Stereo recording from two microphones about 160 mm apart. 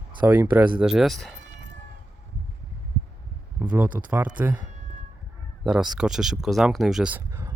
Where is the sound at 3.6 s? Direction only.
10° right (ahead or behind).